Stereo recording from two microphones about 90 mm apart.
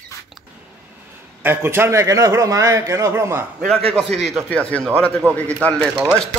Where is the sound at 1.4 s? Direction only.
25° right (ahead or behind).